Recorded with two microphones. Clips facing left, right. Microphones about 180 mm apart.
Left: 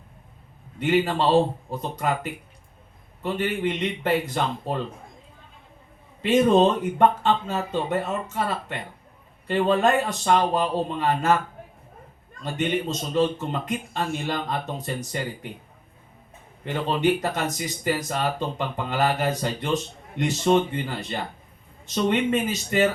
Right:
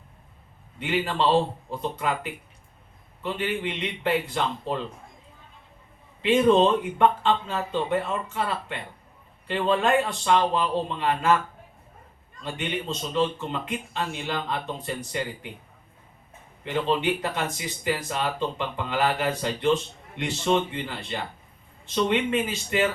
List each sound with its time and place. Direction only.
0.8 s speech: 45° left (ahead or behind)
3.3 s speech: 45° left (ahead or behind)
6.2 s speech: 45° left (ahead or behind)
12.4 s speech: 45° left (ahead or behind)
16.6 s speech: 40° left (ahead or behind)